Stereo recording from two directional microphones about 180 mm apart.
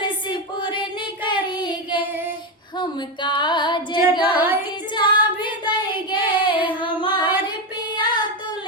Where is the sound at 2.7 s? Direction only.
25° left (ahead or behind).